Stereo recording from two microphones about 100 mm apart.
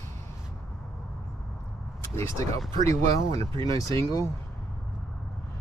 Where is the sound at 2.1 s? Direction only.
30° left (ahead or behind).